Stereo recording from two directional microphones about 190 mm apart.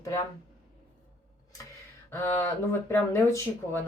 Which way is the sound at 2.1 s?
10° left (ahead or behind).